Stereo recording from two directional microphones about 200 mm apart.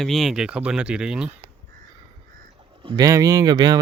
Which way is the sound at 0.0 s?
Centre (ahead or behind).